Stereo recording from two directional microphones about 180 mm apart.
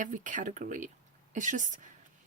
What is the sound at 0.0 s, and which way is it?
Speech, 45° right (ahead or behind).